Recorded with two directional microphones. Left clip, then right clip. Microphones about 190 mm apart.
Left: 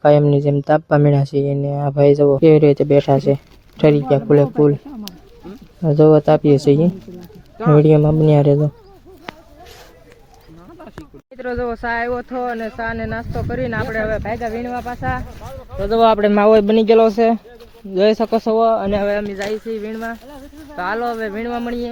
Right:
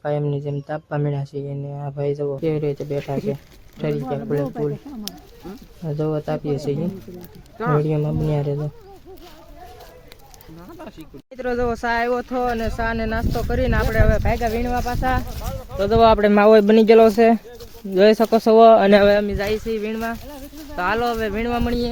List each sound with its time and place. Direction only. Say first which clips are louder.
0.0 s speech: left 12 dB; 30° left (ahead or behind)
5.8 s speech: left 13 dB; 30° left (ahead or behind)
11.3 s speech: even; 10° right (ahead or behind)
15.9 s speech: left 1 dB; 10° left (ahead or behind); by 18.5 s 10° right (ahead or behind)
18.5 s speech: right 6 dB; 30° right (ahead or behind)
18.9 s speech: right 5 dB; 60° right (ahead or behind)
19.4 s speech: even; 10° right (ahead or behind)